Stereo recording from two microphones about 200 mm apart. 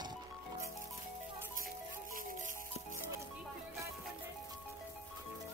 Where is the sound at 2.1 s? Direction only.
40° right (ahead or behind).